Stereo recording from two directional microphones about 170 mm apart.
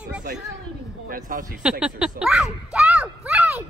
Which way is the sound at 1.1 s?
55° right (ahead or behind).